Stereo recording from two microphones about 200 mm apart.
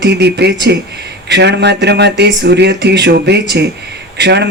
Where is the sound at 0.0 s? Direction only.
55° right (ahead or behind).